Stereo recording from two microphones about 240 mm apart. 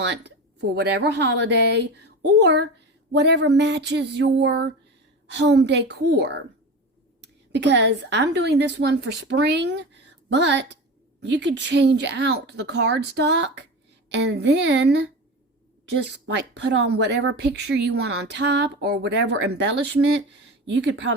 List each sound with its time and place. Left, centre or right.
0.0 s speech: right